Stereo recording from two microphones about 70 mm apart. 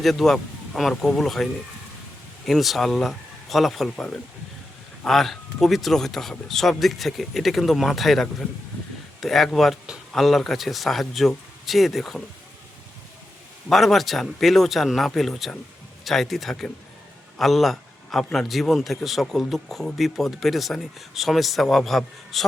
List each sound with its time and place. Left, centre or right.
0.0 s speech: centre
2.5 s speech: centre
13.7 s a man's voice: centre